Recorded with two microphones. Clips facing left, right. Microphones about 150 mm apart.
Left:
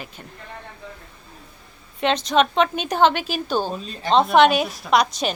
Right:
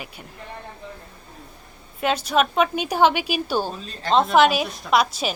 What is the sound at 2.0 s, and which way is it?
A woman's voice, 10° right (ahead or behind).